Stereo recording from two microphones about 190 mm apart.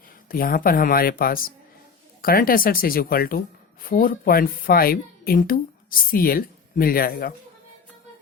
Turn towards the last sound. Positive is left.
turn(degrees=50)  # may be behind; listen again after turning